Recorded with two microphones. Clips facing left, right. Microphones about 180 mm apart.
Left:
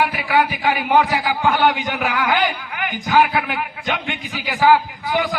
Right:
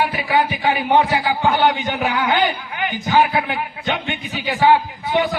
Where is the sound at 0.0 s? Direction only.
25° right (ahead or behind).